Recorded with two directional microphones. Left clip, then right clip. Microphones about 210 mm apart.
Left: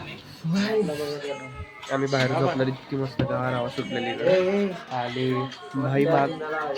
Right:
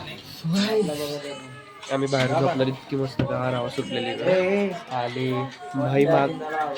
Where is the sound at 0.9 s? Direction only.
10° right (ahead or behind).